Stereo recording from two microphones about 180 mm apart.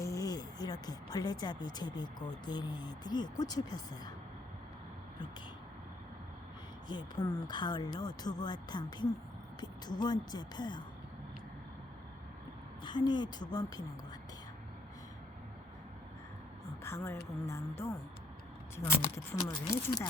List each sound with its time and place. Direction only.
0.0 s a sound: 20° left (ahead or behind)
2.4 s speech: 25° left (ahead or behind)
6.8 s speech: 25° left (ahead or behind)
12.8 s a woman's voice: 25° left (ahead or behind)
16.8 s speech: 15° left (ahead or behind)